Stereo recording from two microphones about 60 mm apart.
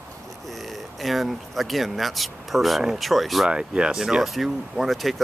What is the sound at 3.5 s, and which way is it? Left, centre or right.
Speech, centre.